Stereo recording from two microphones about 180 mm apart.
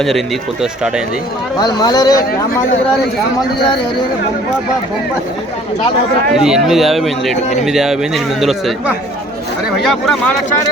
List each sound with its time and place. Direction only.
1.5 s speech: 20° left (ahead or behind)
6.3 s a man's voice: centre (ahead or behind)
9.8 s a man's voice: centre (ahead or behind)